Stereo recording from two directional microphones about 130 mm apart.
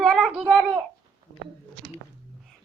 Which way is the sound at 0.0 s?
Centre (ahead or behind).